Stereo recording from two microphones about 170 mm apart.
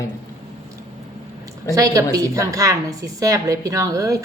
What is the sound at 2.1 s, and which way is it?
A woman's voice, 20° right (ahead or behind).